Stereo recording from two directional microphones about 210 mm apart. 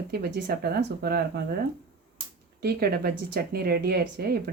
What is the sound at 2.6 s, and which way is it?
Speech, 50° right (ahead or behind).